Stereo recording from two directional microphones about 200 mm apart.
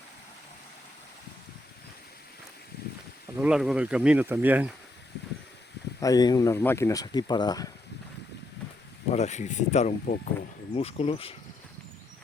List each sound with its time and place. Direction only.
2.8 s a sound: 55° left (ahead or behind)
3.3 s speech: 5° right (ahead or behind)
6.0 s speech: 20° left (ahead or behind)
9.1 s speech: 35° left (ahead or behind)